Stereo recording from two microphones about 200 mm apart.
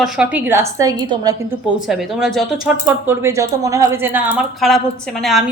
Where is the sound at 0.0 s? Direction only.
5° right (ahead or behind).